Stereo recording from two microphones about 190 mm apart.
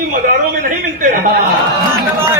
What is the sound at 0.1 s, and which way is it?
A man's voice, 45° right (ahead or behind).